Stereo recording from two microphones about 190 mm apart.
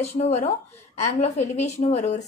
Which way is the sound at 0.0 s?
35° left (ahead or behind).